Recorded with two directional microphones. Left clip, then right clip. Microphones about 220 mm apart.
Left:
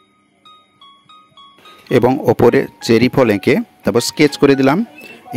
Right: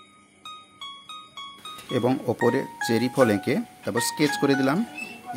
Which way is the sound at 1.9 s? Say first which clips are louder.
Left 12 dB; 40° left (ahead or behind).